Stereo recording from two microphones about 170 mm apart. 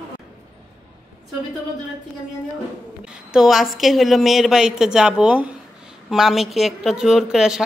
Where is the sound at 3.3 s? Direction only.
Centre (ahead or behind).